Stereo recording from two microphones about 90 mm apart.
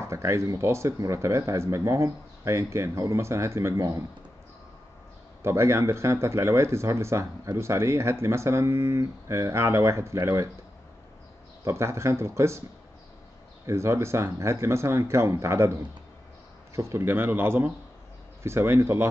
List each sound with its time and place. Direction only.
0.0 s speech: 35° right (ahead or behind)
5.4 s speech: 30° right (ahead or behind)
11.6 s speech: 30° right (ahead or behind)
13.7 s speech: 30° right (ahead or behind)
16.7 s speech: 30° right (ahead or behind)